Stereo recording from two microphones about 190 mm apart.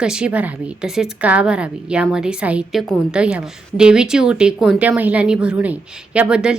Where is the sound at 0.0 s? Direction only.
5° right (ahead or behind).